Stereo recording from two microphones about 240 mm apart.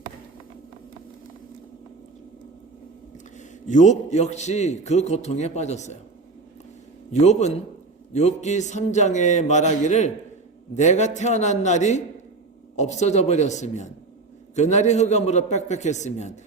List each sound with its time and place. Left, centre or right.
3.3 s a man's voice: left
7.1 s a man's voice: left